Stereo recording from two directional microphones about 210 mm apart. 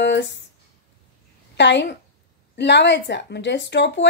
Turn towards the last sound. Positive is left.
turn(degrees=55)  # may be behind; listen again after turning